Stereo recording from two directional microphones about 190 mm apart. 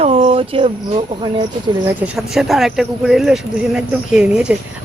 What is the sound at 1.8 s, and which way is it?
Speech, 5° right (ahead or behind).